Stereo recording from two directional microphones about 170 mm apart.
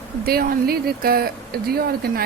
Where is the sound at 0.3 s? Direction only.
65° right (ahead or behind).